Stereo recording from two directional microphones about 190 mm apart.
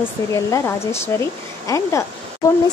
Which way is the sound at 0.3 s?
15° left (ahead or behind).